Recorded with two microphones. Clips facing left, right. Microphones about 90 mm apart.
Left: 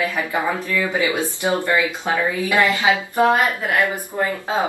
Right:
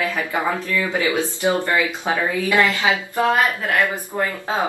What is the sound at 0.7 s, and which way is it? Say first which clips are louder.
Speech: left 1 dB; 15° left (ahead or behind).